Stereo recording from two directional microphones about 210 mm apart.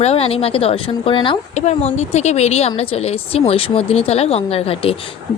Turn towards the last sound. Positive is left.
turn(degrees=25)  # may be behind; listen again after turning